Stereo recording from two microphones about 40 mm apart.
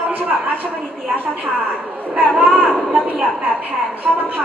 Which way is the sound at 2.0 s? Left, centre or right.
Right.